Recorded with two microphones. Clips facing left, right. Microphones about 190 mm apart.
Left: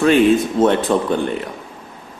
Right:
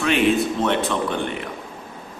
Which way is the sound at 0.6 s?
40° left (ahead or behind).